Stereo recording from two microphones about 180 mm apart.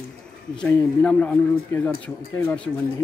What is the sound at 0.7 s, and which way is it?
Speech, 5° left (ahead or behind).